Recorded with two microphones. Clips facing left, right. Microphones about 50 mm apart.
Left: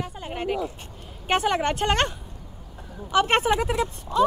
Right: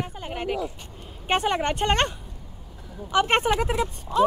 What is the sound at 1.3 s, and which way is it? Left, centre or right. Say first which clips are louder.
Speech: left 1 dB; right.